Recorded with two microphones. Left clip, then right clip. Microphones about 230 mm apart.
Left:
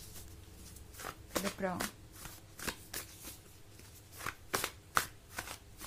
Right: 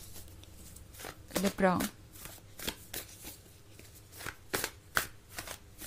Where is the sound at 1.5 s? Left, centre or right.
Right.